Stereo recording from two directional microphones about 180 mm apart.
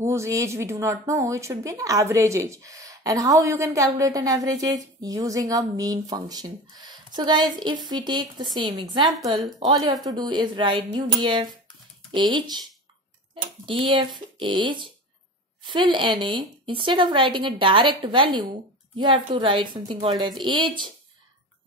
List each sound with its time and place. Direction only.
0.0 s speech: 15° right (ahead or behind)
12.1 s speech: 25° right (ahead or behind)
13.7 s speech: 30° right (ahead or behind)